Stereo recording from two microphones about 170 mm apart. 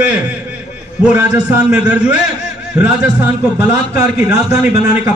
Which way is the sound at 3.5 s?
15° right (ahead or behind).